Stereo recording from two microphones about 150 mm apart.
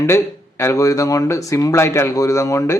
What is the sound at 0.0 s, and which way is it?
Speech, 15° left (ahead or behind).